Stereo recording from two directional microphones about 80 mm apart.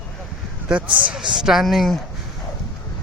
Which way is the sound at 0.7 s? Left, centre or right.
Centre.